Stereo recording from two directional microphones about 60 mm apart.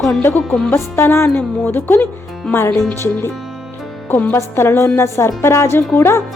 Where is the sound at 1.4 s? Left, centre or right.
Left.